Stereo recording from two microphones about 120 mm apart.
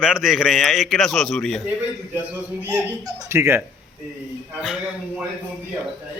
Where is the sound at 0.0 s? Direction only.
5° right (ahead or behind).